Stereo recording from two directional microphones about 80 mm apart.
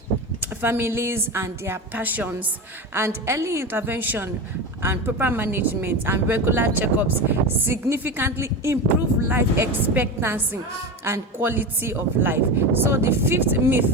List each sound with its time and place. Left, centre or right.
0.6 s a woman's voice: right